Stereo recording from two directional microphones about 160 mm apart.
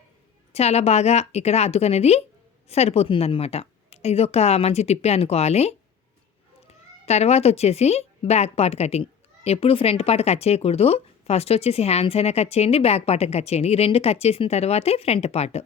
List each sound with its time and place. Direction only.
0.5 s speech: 40° left (ahead or behind)